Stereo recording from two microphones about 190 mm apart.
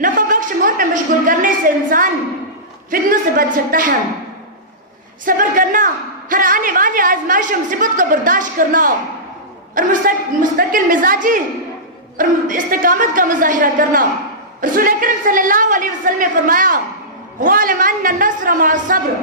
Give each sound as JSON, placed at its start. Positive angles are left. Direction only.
{"t": 0.0, "sound": "a sound", "side_deg": -45}
{"t": 2.9, "sound": "a woman's voice", "side_deg": -50}
{"t": 5.2, "sound": "a woman's voice", "side_deg": -45}